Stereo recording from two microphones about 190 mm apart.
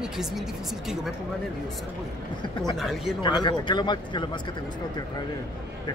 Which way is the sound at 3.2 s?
25° left (ahead or behind).